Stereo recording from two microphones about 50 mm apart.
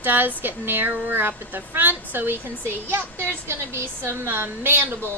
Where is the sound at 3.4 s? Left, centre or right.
Right.